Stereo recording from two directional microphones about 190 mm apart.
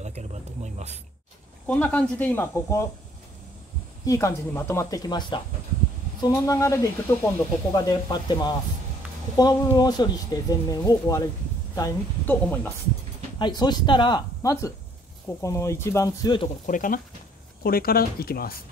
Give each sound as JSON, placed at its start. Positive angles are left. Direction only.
{"t": 0.0, "sound": "a sound", "side_deg": -35}
{"t": 1.7, "sound": "speech", "side_deg": 10}
{"t": 4.0, "sound": "speech", "side_deg": 15}
{"t": 13.4, "sound": "speech", "side_deg": 20}
{"t": 16.6, "sound": "speech", "side_deg": 45}